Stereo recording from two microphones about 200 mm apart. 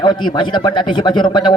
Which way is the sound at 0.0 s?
20° left (ahead or behind).